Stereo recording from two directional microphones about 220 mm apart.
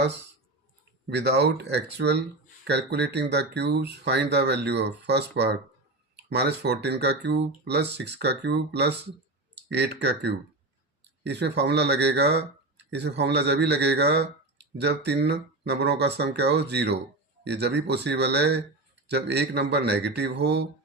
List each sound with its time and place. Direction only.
1.1 s speech: 50° right (ahead or behind)